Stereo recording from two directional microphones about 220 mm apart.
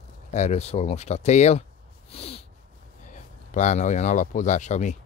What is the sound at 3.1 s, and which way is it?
Speech, 35° left (ahead or behind).